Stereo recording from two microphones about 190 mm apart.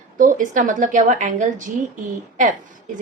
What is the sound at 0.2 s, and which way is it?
A woman's voice, 45° right (ahead or behind).